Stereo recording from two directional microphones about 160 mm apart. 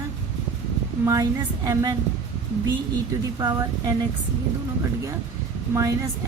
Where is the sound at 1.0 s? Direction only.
20° right (ahead or behind).